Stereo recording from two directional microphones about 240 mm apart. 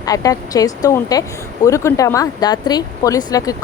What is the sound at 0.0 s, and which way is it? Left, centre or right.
Speech, centre.